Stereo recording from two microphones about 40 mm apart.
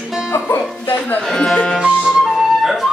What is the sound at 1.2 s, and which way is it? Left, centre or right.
Speech, centre.